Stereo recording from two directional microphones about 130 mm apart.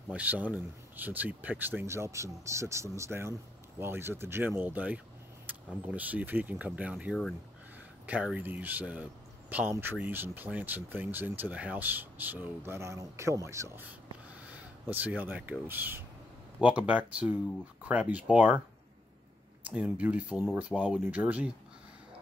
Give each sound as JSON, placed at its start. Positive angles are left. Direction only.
{"t": 0.1, "sound": "speech", "side_deg": -10}
{"t": 14.5, "sound": "speech", "side_deg": -10}
{"t": 19.6, "sound": "speech", "side_deg": -10}